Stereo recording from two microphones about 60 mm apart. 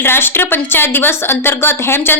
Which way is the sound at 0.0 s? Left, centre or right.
Left.